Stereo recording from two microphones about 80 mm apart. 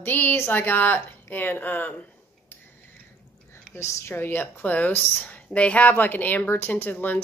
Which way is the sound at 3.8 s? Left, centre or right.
Left.